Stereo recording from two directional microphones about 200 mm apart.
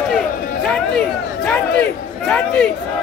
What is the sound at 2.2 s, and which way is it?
Speech, 5° left (ahead or behind).